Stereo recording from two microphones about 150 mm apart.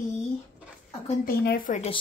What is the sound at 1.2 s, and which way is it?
Speech, 85° left.